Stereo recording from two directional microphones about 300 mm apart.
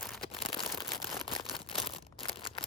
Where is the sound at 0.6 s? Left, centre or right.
Centre.